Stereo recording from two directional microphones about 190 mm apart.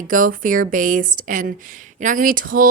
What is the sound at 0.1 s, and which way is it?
Speech, 45° right (ahead or behind).